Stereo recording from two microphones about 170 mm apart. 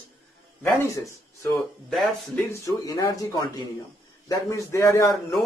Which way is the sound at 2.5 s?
20° left (ahead or behind).